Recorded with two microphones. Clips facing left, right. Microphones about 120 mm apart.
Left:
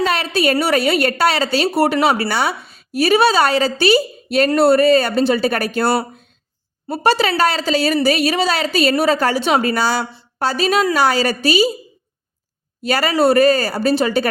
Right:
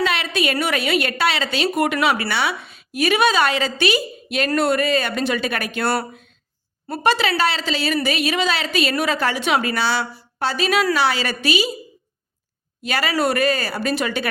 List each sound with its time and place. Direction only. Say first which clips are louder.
0.0 s a woman's voice: left 4 dB; 40° left (ahead or behind)
12.8 s a woman's voice: left 5 dB; 40° left (ahead or behind)